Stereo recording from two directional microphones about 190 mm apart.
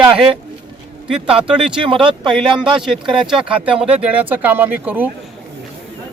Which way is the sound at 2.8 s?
Centre (ahead or behind).